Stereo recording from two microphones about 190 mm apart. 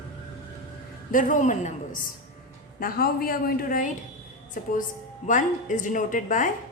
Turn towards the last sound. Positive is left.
turn(degrees=45)  # may be behind; listen again after turning